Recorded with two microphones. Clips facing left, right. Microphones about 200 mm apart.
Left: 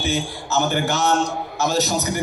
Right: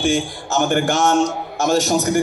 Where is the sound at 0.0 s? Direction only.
50° right (ahead or behind).